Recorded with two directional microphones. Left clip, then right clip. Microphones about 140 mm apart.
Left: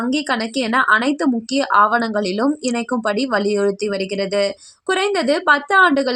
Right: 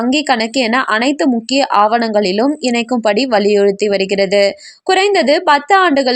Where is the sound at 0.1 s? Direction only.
15° right (ahead or behind).